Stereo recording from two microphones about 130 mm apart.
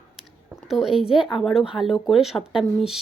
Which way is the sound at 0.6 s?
5° right (ahead or behind).